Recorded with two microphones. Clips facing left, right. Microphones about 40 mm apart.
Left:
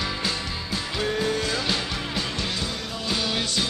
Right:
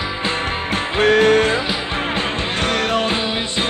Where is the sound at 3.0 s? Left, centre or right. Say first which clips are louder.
Right 6 dB; right.